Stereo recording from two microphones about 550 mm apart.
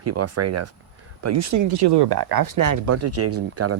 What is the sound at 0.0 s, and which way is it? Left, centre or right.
Speech, right.